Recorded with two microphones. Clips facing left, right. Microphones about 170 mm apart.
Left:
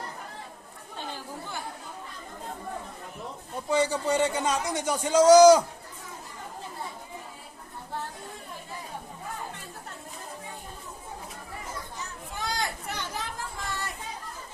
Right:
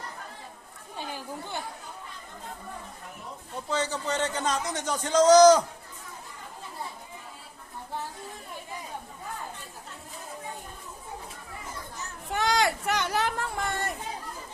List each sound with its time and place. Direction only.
0.9 s chatter: 15° right (ahead or behind)
3.5 s a man's voice: 10° left (ahead or behind)
12.3 s a sound: 80° right; by 13.9 s 55° right (ahead or behind)